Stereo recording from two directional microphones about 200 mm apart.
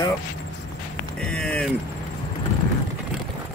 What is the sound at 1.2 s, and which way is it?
Speech, 5° left (ahead or behind).